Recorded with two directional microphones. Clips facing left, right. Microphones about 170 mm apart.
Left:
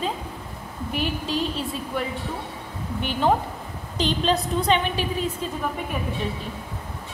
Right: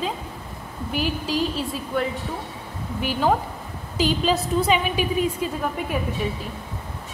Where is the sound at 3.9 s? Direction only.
5° right (ahead or behind).